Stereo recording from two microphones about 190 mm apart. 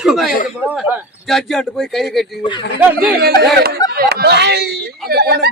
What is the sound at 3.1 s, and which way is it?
Speech, 55° right (ahead or behind).